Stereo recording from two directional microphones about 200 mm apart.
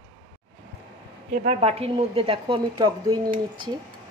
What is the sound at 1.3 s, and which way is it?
A woman's voice, 35° right (ahead or behind).